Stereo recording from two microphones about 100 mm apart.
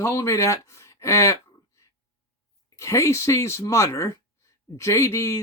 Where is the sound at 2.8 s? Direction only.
30° left (ahead or behind).